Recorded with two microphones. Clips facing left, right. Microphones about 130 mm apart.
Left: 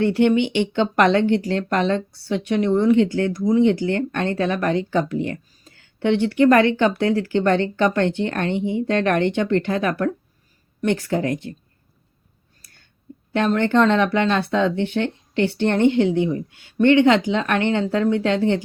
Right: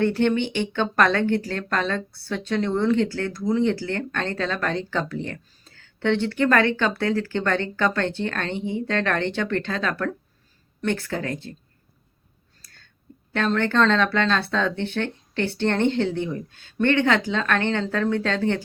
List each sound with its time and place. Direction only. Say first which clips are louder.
0.0 s speech: left 4 dB; 15° left (ahead or behind)
13.3 s speech: left 4 dB; 15° left (ahead or behind)